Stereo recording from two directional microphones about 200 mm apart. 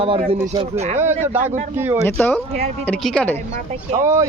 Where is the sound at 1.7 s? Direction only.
10° right (ahead or behind).